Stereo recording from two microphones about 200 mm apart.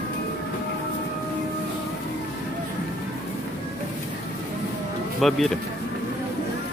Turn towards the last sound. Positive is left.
turn(degrees=0)  # may be behind; listen again after turning